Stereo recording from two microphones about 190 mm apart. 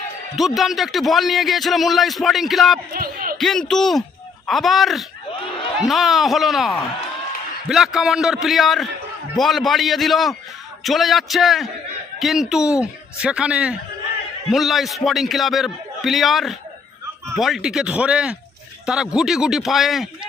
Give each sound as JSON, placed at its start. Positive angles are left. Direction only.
{"t": 0.4, "sound": "speech", "side_deg": 0}
{"t": 2.9, "sound": "speech", "side_deg": -50}
{"t": 3.3, "sound": "speech", "side_deg": 0}